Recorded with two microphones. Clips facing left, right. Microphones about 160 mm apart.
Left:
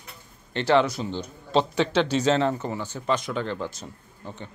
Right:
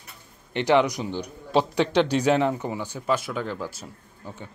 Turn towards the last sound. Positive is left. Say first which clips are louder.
# left 1 dB
turn(degrees=0)  # may be behind; listen again after turning